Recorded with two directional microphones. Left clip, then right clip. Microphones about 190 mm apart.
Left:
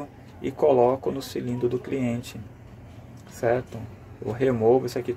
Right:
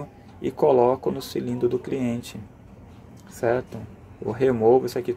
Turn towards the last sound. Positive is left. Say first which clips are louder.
# right 2 dB
turn(degrees=-15)  # may be behind; listen again after turning